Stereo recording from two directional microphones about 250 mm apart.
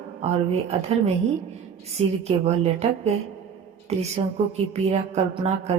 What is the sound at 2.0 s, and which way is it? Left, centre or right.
Mantra, right.